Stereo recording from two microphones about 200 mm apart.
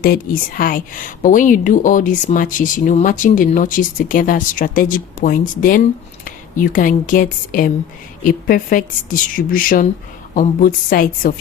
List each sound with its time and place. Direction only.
0.0 s a woman's voice: 45° left (ahead or behind)